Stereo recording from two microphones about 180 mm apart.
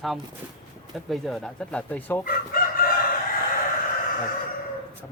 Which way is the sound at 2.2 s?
55° left (ahead or behind).